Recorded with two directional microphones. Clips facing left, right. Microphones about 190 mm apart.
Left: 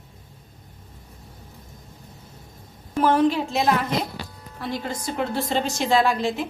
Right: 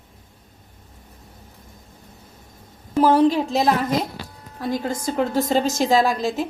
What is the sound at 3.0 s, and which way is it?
A woman's voice, 35° right (ahead or behind).